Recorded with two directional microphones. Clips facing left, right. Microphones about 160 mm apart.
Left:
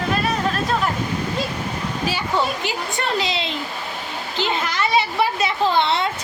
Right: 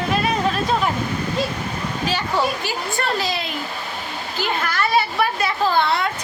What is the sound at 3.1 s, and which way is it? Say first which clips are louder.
Speech: left 1 dB; 20° left (ahead or behind).